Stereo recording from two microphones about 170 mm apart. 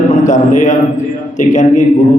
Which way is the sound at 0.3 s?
45° left (ahead or behind).